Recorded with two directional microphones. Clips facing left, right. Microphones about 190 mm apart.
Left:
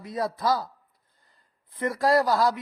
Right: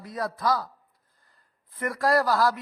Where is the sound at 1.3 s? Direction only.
15° left (ahead or behind).